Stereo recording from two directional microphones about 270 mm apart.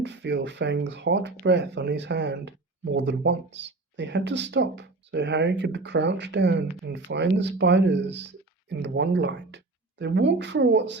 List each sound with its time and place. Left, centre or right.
0.0 s speech: right